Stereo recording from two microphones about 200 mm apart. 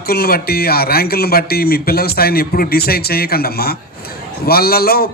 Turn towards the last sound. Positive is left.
turn(degrees=50)  # may be behind; listen again after turning